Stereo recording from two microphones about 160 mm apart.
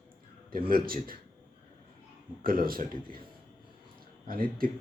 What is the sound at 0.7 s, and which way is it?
Speech, 65° right (ahead or behind).